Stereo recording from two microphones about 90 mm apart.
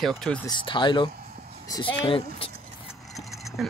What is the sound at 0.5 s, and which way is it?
Speech, 60° left (ahead or behind).